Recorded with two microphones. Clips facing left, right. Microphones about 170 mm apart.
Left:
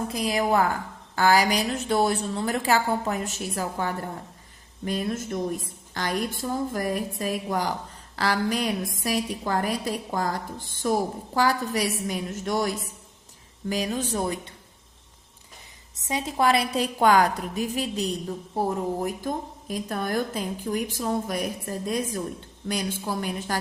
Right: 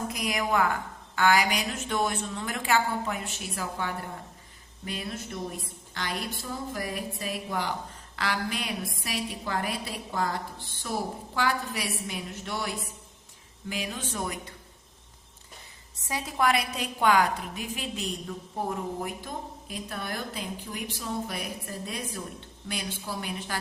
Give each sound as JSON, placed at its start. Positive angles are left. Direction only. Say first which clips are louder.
{"t": 0.1, "sound": "a woman's voice", "louder": "left 6 dB", "side_deg": 30}
{"t": 16.0, "sound": "a woman's voice", "louder": "left 3 dB", "side_deg": 20}